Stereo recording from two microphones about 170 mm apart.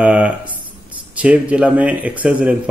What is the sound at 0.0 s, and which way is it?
Speech, 5° right (ahead or behind).